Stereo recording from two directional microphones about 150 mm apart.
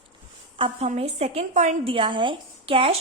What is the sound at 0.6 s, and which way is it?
A woman's voice, 45° right (ahead or behind).